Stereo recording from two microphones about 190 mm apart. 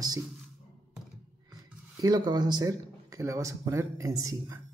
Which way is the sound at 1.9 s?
20° right (ahead or behind).